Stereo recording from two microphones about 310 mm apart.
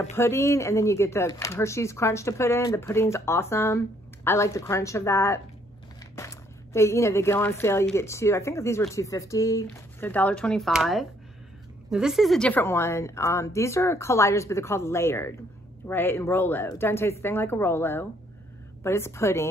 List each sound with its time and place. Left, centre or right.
0.1 s speech: centre